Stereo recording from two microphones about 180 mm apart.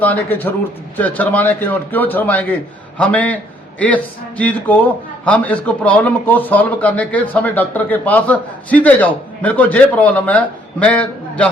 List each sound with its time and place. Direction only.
0.0 s a man's voice: 10° left (ahead or behind)